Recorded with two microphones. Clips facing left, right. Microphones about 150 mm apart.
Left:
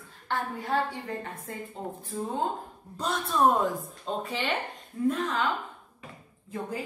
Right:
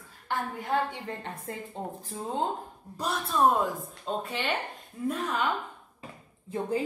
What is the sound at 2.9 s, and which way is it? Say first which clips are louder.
Speech: left 1 dB; 5° right (ahead or behind).